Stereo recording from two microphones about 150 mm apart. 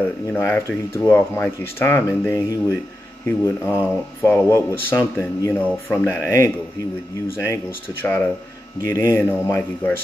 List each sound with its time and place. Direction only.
0.3 s speech: 10° left (ahead or behind)